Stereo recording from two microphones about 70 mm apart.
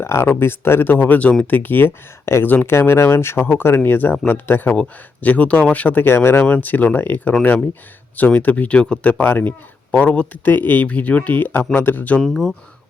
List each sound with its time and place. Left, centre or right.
0.0 s speech: left
4.7 s speech: left
12.2 s speech: centre